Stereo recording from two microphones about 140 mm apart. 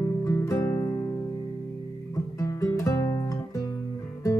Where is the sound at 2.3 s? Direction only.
20° left (ahead or behind).